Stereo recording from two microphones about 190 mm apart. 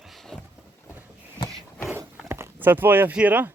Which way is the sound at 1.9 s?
10° right (ahead or behind).